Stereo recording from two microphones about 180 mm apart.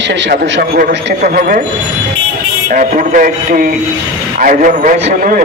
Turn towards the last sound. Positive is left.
turn(degrees=-50)  # may be behind; listen again after turning